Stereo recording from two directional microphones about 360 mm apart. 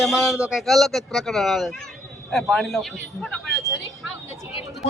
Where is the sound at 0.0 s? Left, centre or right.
Centre.